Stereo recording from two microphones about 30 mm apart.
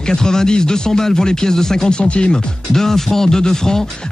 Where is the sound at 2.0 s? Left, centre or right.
Left.